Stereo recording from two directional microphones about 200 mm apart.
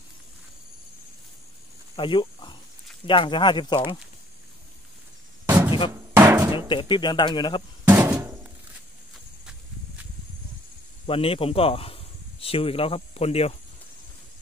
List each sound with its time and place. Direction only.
2.0 s speech: 25° left (ahead or behind)
6.1 s drum: 10° right (ahead or behind)
6.7 s speech: 25° left (ahead or behind)
7.9 s a sound: 10° right (ahead or behind)
11.1 s speech: 30° left (ahead or behind)